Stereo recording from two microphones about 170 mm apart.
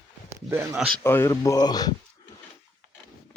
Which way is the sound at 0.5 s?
15° right (ahead or behind).